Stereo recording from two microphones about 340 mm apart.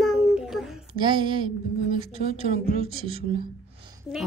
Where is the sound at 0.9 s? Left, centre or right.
Centre.